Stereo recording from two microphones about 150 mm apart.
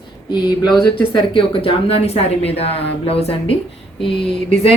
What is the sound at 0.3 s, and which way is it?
Speech, 30° left (ahead or behind).